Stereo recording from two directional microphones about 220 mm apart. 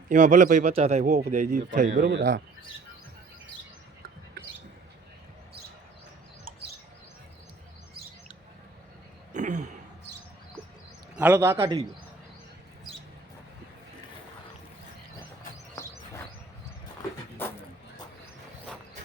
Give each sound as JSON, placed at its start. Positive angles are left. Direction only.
{"t": 0.1, "sound": "speech", "side_deg": -35}
{"t": 2.0, "sound": "speech", "side_deg": -55}
{"t": 9.3, "sound": "a sound", "side_deg": -35}
{"t": 11.1, "sound": "a man's voice", "side_deg": -10}
{"t": 11.6, "sound": "a man's voice", "side_deg": -25}
{"t": 15.8, "sound": "bird", "side_deg": 15}